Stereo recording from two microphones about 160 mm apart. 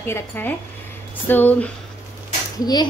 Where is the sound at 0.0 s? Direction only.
15° left (ahead or behind).